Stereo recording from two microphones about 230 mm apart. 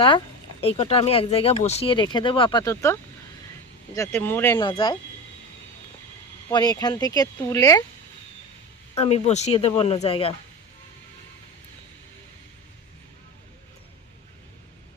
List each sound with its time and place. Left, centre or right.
0.6 s speech: left
6.5 s speech: centre
9.0 s speech: left